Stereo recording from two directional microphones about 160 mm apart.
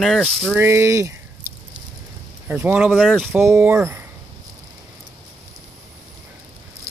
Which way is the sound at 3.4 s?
15° right (ahead or behind).